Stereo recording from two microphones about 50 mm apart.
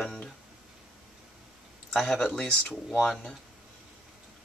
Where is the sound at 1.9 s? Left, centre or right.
Centre.